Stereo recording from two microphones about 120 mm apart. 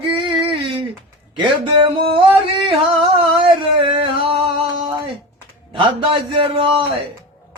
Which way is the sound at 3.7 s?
50° right (ahead or behind).